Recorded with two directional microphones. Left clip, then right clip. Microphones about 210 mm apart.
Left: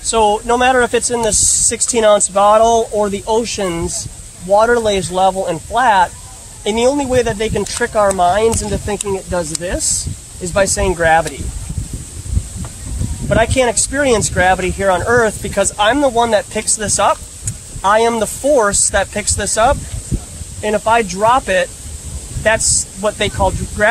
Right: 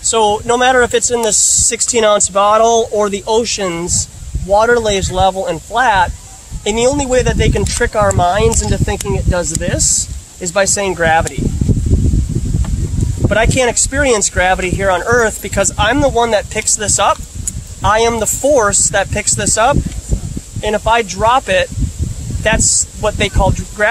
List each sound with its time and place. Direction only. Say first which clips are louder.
0.0 s speech: right 1 dB; 30° right (ahead or behind)
13.3 s speech: even; 30° right (ahead or behind)